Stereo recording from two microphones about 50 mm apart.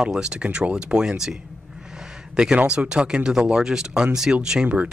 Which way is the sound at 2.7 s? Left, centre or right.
Centre.